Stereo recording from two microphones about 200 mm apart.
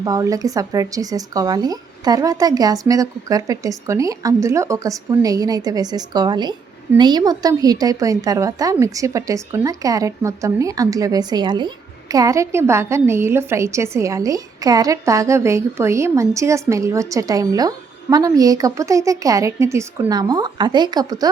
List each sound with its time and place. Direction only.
0.0 s speech: 15° right (ahead or behind)